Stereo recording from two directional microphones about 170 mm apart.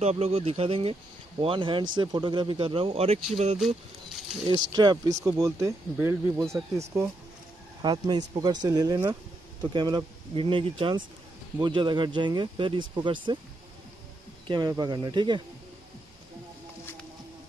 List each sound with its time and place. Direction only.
0.0 s speech: 40° right (ahead or behind)
4.5 s speech: 25° right (ahead or behind)
14.5 s speech: 25° right (ahead or behind)